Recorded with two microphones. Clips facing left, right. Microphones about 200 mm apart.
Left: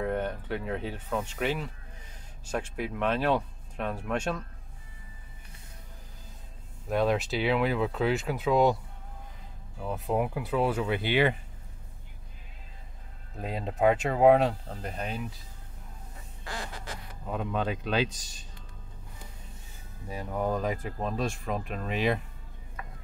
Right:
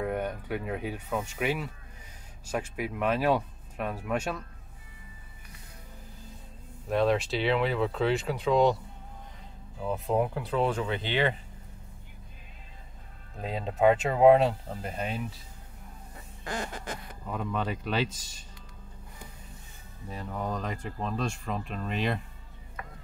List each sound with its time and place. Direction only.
0.0 s speech: 10° right (ahead or behind)
6.9 s speech: centre (ahead or behind)
9.8 s speech: 5° left (ahead or behind)
13.4 s speech: 5° left (ahead or behind)
16.4 s quack: 50° right (ahead or behind)
17.3 s speech: 5° left (ahead or behind)
20.1 s speech: 10° left (ahead or behind)